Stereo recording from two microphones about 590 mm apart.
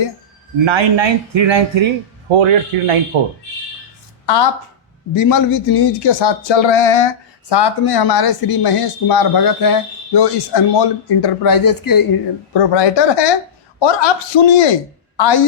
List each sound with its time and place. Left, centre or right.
0.6 s a man's voice: right
4.3 s speech: left
7.5 s speech: left